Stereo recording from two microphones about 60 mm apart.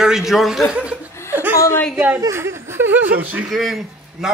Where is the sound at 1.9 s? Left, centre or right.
Right.